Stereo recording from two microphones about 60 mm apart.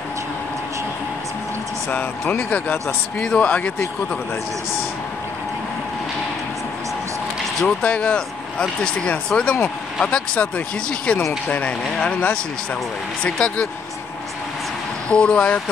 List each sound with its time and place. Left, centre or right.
1.9 s speech: left
3.2 s speech: centre
3.4 s speech: left
7.6 s speech: centre
15.0 s speech: centre